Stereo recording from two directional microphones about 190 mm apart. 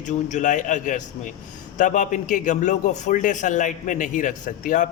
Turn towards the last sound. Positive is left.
turn(degrees=45)  # may be behind; listen again after turning